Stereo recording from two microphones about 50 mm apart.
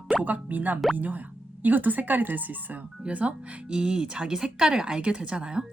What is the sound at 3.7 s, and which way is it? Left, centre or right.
A woman's voice, centre.